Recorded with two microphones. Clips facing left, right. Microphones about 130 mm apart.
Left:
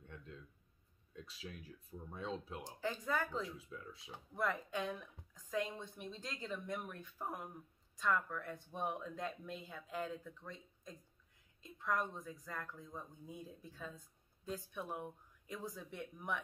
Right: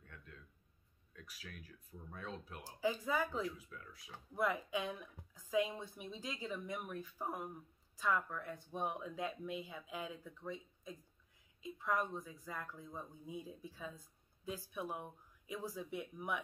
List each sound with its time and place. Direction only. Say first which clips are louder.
0.0 s a sound: left 5 dB; 25° left (ahead or behind)
1.1 s speech: left 4 dB; 25° left (ahead or behind)
2.8 s speech: right 3 dB; 5° right (ahead or behind)
3.4 s speech: right 3 dB; 25° left (ahead or behind)
4.4 s speech: right 2 dB; 5° right (ahead or behind)